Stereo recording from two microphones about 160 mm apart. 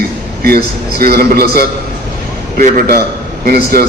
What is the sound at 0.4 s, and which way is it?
A man's voice, 70° right (ahead or behind).